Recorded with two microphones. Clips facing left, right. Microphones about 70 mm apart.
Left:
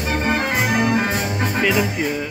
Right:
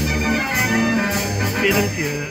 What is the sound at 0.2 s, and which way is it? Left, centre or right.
Music, left.